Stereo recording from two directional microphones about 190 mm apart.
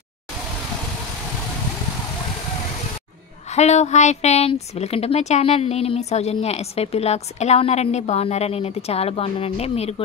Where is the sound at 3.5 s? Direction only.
35° left (ahead or behind).